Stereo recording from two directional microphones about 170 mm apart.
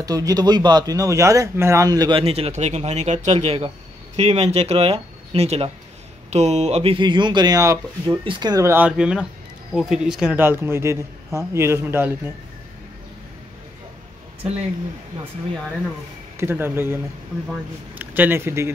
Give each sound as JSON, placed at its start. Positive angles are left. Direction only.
{"t": 0.0, "sound": "a man's voice", "side_deg": -20}
{"t": 16.3, "sound": "speech", "side_deg": -15}